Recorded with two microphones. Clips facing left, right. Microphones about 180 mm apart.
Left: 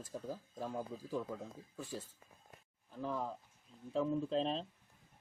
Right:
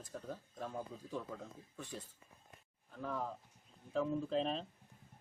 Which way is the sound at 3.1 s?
Centre (ahead or behind).